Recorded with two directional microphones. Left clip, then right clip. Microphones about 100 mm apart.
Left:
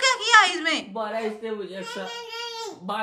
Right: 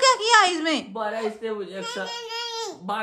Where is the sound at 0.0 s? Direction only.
55° right (ahead or behind).